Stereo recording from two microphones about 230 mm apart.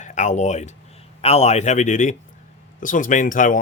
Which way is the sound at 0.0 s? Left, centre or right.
Left.